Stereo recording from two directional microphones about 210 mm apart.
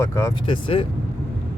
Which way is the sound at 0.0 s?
15° left (ahead or behind).